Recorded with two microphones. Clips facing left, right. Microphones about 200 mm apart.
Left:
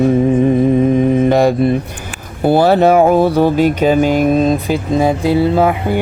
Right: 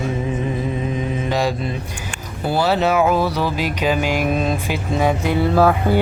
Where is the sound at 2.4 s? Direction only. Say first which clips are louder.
Left 8 dB; 55° left (ahead or behind); by 5.3 s 35° left (ahead or behind).